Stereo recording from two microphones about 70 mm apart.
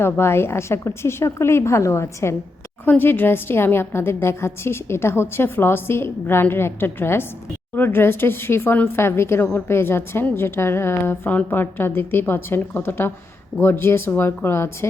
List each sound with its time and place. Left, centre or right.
0.0 s a woman's voice: left
3.0 s a woman's voice: left
9.0 s a woman's voice: left